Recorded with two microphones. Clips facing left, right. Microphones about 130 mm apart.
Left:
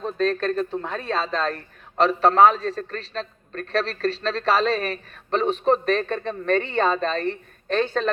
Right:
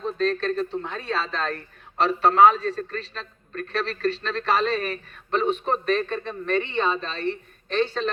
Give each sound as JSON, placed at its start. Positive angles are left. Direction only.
{"t": 0.2, "sound": "a man's voice", "side_deg": 45}